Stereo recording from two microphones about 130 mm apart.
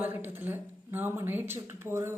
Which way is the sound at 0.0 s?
15° right (ahead or behind).